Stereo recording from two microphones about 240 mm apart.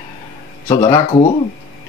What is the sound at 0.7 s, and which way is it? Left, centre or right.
Speech, centre.